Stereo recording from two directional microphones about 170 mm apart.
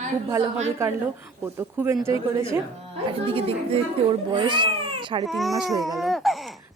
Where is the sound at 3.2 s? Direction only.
35° right (ahead or behind).